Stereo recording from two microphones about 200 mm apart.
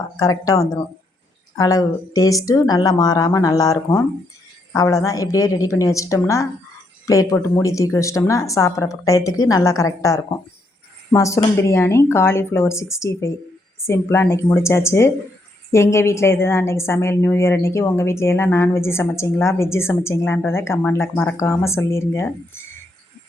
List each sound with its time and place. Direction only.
0.2 s a woman's voice: 15° left (ahead or behind)